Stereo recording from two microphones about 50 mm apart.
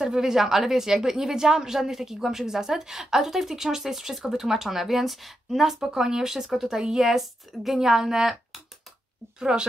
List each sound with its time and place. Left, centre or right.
0.0 s a woman's voice: centre
9.4 s a woman's voice: centre